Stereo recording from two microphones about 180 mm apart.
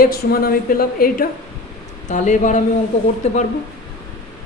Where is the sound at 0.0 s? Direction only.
55° left (ahead or behind).